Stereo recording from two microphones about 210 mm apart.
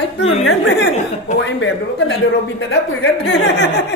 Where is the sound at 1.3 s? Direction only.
35° left (ahead or behind).